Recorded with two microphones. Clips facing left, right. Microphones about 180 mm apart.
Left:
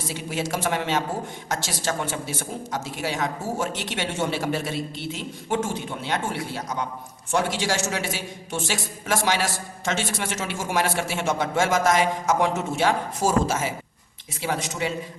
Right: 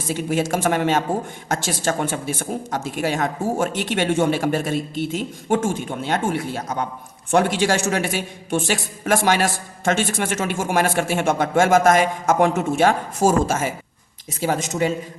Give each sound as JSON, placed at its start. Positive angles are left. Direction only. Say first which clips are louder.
{"t": 0.1, "sound": "a man's voice", "louder": "right 8 dB", "side_deg": -50}